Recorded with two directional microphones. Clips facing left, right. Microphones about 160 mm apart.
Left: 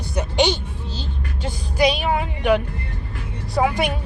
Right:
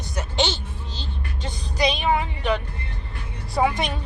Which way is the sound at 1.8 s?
5° left (ahead or behind).